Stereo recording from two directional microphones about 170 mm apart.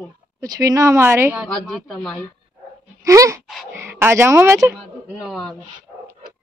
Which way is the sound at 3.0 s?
20° right (ahead or behind).